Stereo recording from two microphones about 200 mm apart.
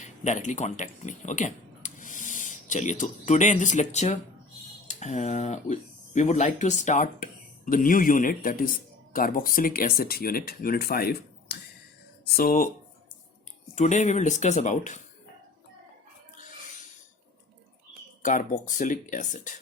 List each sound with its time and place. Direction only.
0.0 s speech: 40° left (ahead or behind)
13.7 s speech: 35° left (ahead or behind)
18.2 s speech: 40° left (ahead or behind)